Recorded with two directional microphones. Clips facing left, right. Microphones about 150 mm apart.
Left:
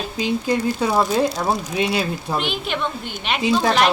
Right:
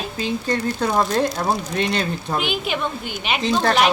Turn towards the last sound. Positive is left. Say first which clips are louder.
# left 1 dB
turn(degrees=0)  # may be behind; listen again after turning